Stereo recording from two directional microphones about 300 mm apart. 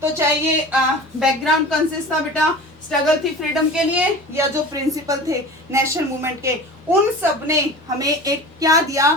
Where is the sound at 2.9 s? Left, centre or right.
Centre.